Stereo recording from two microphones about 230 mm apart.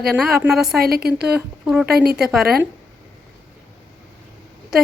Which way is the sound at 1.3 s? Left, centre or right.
Centre.